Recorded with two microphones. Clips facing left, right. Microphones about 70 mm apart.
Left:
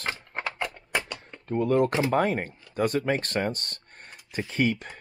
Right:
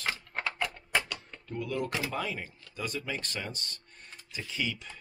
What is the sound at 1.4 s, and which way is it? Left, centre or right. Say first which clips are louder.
Speech: left 11 dB; left.